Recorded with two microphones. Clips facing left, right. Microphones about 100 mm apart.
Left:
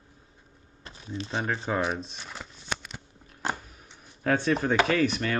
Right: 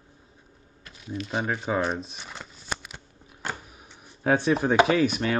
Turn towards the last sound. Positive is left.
turn(degrees=-10)  # may be behind; listen again after turning